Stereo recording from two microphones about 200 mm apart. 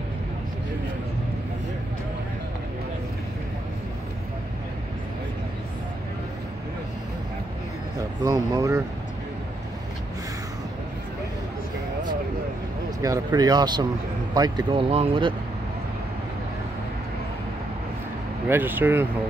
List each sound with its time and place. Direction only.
8.2 s speech: 15° right (ahead or behind)
13.0 s speech: 15° right (ahead or behind)
18.5 s speech: 10° right (ahead or behind)